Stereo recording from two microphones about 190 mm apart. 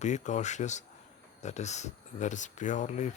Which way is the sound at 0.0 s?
40° left (ahead or behind).